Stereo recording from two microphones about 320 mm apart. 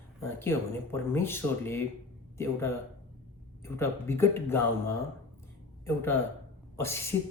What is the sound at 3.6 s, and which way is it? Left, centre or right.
Speech, centre.